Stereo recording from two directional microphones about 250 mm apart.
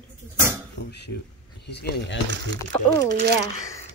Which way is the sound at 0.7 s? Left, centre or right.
Left.